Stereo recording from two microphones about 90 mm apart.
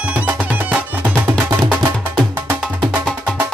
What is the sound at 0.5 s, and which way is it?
Music, 20° right (ahead or behind).